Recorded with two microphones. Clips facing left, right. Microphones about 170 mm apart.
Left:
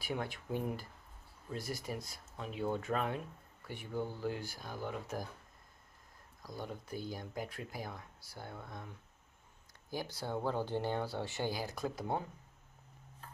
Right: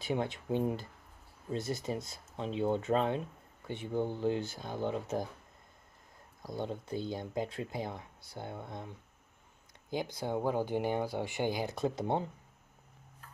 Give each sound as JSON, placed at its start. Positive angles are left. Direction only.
{"t": 0.0, "sound": "speech", "side_deg": -20}
{"t": 6.4, "sound": "speech", "side_deg": -25}